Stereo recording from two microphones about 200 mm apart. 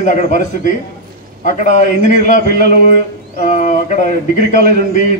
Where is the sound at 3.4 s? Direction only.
40° left (ahead or behind).